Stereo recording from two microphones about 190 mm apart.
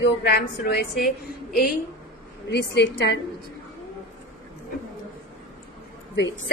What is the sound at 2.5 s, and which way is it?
Speech, 65° left (ahead or behind).